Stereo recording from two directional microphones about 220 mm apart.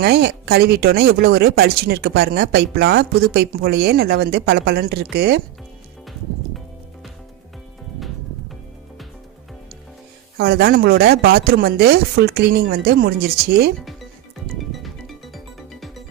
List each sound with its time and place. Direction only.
0.0 s speech: 50° right (ahead or behind)
7.9 s music: centre (ahead or behind)
10.3 s speech: 45° right (ahead or behind)
14.6 s music: centre (ahead or behind)